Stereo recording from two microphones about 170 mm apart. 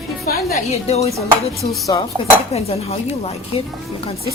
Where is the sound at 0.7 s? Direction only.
40° left (ahead or behind).